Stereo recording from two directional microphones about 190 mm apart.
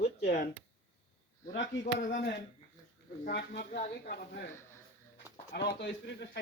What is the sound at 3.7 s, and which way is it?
Speech, 45° left (ahead or behind).